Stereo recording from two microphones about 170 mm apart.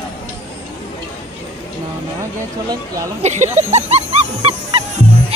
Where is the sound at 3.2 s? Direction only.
40° right (ahead or behind).